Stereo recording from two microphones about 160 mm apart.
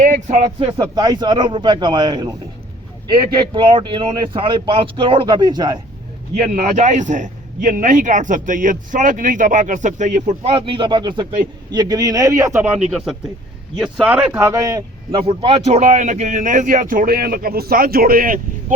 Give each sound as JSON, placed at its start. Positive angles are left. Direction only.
{"t": 0.0, "sound": "speech", "side_deg": -50}
{"t": 0.7, "sound": "a man's voice", "side_deg": -25}
{"t": 3.3, "sound": "speech", "side_deg": -30}
{"t": 6.4, "sound": "a man's voice", "side_deg": -50}
{"t": 10.5, "sound": "a man's voice", "side_deg": -30}
{"t": 13.7, "sound": "speech", "side_deg": 0}
{"t": 15.1, "sound": "a man's voice", "side_deg": -35}